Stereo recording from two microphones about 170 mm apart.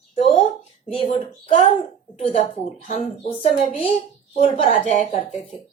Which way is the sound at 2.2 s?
45° left (ahead or behind).